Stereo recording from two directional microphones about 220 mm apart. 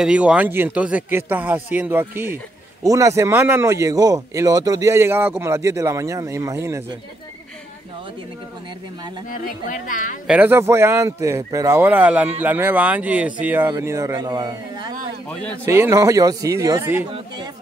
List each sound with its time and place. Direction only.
0.0 s speech: 5° right (ahead or behind)
9.3 s speech: 35° left (ahead or behind)
10.2 s speech: 5° right (ahead or behind)
15.2 s a man's voice: 5° left (ahead or behind)
15.6 s speech: 10° right (ahead or behind)